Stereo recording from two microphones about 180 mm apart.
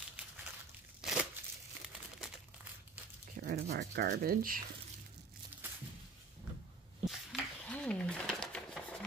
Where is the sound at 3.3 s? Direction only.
60° right (ahead or behind).